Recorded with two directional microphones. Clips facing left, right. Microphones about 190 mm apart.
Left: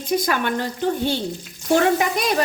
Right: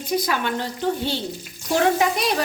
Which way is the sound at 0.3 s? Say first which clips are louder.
Left 2 dB; 50° left (ahead or behind).